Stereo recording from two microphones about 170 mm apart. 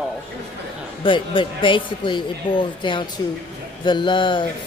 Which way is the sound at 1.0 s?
30° left (ahead or behind).